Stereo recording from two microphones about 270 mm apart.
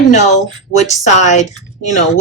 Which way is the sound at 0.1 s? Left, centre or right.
Left.